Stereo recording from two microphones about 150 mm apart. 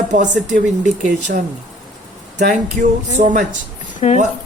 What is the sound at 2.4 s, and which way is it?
Speech, 60° right (ahead or behind).